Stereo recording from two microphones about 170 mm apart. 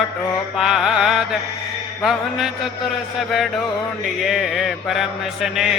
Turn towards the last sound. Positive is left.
turn(degrees=0)  # may be behind; listen again after turning